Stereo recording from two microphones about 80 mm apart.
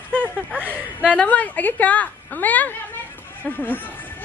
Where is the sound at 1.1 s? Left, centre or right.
Centre.